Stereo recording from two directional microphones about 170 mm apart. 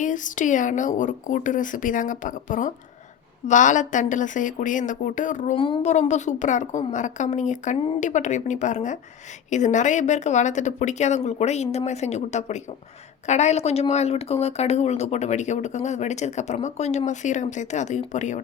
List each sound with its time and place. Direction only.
0.0 s speech: 50° left (ahead or behind)
5.5 s speech: 30° left (ahead or behind)
5.9 s speech: 45° left (ahead or behind)